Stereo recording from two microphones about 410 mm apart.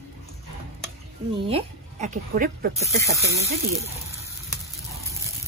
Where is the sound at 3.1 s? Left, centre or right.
Centre.